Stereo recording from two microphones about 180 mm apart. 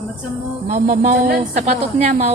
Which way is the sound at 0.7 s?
40° right (ahead or behind).